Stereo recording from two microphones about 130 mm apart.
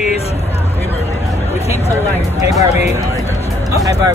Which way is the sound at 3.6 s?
25° right (ahead or behind).